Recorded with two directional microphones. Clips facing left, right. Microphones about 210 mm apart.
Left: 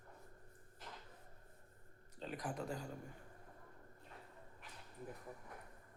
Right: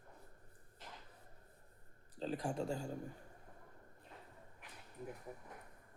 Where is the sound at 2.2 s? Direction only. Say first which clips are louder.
Right 5 dB; 30° right (ahead or behind).